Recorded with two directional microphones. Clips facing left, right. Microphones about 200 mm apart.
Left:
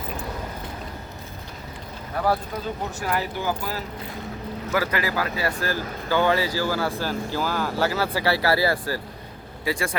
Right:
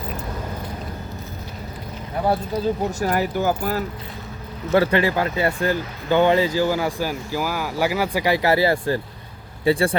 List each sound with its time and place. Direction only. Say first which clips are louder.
2.1 s speech: right 2 dB; 25° right (ahead or behind)
3.0 s speech: right 4 dB; 40° right (ahead or behind)
4.7 s speech: right 7 dB; 30° right (ahead or behind)
9.6 s speech: right 8 dB; 30° right (ahead or behind)